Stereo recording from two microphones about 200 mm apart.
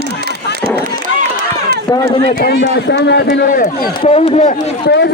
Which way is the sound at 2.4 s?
55° left (ahead or behind).